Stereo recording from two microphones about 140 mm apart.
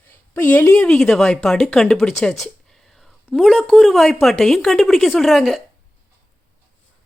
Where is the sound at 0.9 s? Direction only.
5° left (ahead or behind).